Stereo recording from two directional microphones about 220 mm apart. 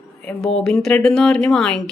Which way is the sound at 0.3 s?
Centre (ahead or behind).